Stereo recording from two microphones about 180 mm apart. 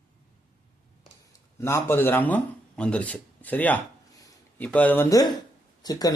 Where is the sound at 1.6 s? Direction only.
15° left (ahead or behind).